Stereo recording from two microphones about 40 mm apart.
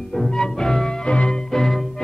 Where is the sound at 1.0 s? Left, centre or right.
Left.